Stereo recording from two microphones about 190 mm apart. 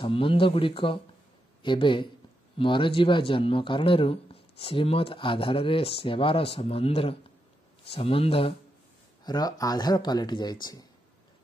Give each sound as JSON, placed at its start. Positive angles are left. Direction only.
{"t": 0.0, "sound": "speech", "side_deg": 30}